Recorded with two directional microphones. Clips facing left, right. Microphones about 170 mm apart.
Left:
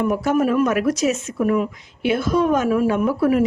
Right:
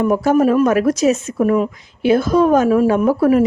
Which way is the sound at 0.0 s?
35° right (ahead or behind).